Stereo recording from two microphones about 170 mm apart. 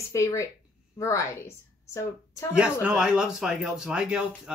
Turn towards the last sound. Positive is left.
turn(degrees=-5)  # may be behind; listen again after turning